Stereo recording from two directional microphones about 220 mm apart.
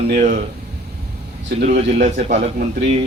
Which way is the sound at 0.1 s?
35° right (ahead or behind).